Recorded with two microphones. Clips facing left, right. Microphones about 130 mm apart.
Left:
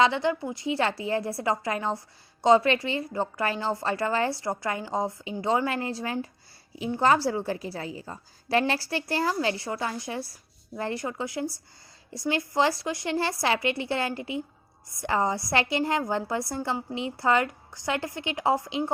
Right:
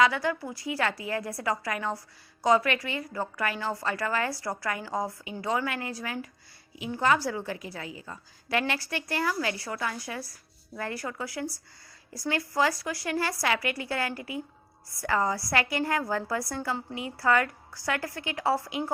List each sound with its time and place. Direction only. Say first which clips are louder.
0.0 s a woman's voice: left 2 dB; 25° left (ahead or behind)